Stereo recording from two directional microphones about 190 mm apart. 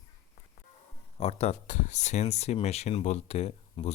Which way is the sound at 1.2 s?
30° left (ahead or behind).